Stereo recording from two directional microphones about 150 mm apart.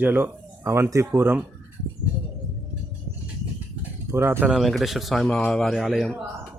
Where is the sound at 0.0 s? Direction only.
15° right (ahead or behind).